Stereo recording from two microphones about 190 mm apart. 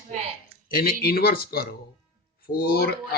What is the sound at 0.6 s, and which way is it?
Speech, 50° left (ahead or behind).